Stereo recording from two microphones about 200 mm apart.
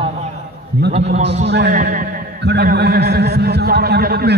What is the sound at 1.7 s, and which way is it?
Speech, 45° right (ahead or behind).